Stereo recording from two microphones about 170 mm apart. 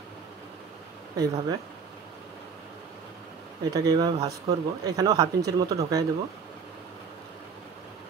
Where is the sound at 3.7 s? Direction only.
20° right (ahead or behind).